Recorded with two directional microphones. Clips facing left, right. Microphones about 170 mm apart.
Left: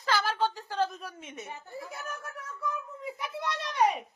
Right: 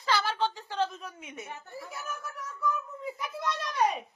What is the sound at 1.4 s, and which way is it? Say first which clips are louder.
Speech: left 2 dB; 20° left (ahead or behind).